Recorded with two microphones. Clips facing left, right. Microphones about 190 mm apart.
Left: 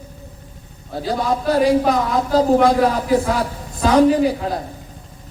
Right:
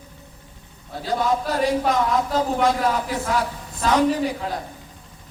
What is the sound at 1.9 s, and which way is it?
Speech, 35° left (ahead or behind).